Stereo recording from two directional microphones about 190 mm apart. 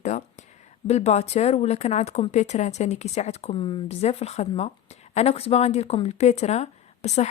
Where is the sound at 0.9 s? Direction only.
35° left (ahead or behind).